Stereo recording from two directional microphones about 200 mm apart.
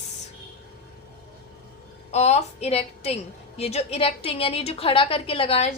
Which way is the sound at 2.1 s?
35° left (ahead or behind).